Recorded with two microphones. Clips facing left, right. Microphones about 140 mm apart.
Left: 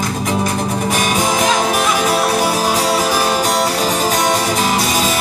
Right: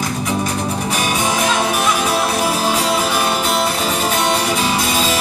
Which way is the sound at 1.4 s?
40° left (ahead or behind).